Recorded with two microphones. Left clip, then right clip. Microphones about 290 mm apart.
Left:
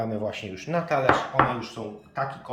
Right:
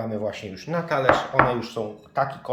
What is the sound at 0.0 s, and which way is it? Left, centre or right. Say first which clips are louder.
Speech: right 1 dB; centre.